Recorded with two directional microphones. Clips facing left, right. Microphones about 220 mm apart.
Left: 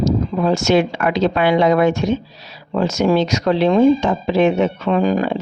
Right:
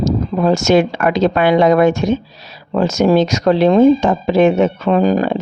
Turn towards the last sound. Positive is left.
turn(degrees=-40)  # may be behind; listen again after turning